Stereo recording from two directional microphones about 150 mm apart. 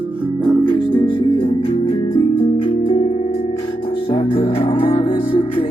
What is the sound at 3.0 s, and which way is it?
Music, 50° left (ahead or behind).